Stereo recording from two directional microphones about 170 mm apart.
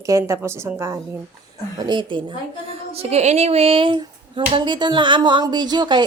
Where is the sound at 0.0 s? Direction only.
20° right (ahead or behind).